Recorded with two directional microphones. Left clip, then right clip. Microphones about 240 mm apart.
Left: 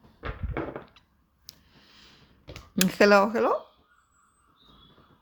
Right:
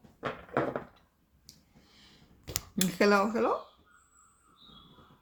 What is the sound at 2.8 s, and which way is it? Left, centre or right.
Speech, left.